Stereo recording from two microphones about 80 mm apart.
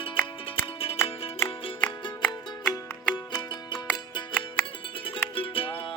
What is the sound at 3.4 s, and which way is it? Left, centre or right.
Music, left.